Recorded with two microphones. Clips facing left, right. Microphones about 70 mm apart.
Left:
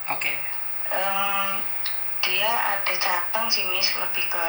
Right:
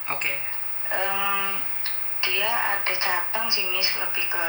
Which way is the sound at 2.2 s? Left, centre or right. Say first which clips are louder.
Left 1 dB; right.